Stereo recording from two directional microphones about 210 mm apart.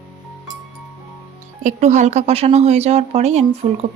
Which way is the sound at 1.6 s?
35° right (ahead or behind).